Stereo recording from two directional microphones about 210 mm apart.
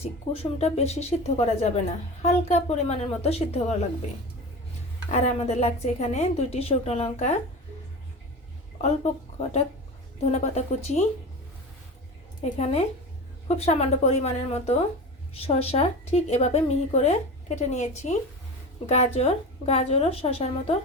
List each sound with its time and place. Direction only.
0.0 s a woman's voice: 30° left (ahead or behind)
5.2 s a woman's voice: 30° left (ahead or behind)
8.8 s a woman's voice: 30° left (ahead or behind)
12.5 s a woman's voice: 30° left (ahead or behind)